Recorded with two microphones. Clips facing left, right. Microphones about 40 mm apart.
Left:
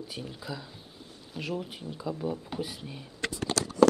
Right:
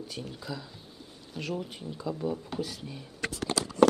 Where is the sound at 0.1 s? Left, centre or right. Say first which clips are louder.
Even; centre.